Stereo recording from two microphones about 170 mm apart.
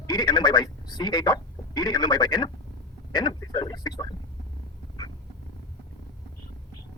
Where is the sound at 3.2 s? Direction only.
25° left (ahead or behind).